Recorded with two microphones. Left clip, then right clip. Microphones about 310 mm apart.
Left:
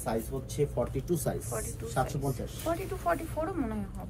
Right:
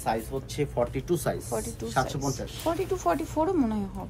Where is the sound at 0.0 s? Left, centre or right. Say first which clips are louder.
Right 5 dB; centre.